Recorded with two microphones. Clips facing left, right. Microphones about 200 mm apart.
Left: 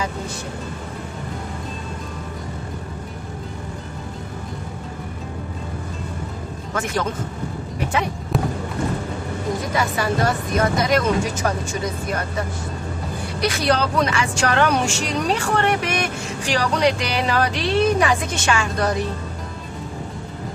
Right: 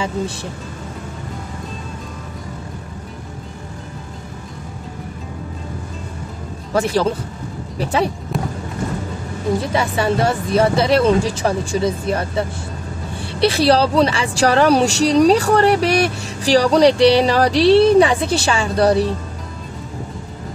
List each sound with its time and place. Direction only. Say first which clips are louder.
6.7 s a woman's voice: right 7 dB; 35° right (ahead or behind)
8.3 s music: left 1 dB; centre (ahead or behind)
9.7 s a woman's voice: right 4 dB; 30° right (ahead or behind)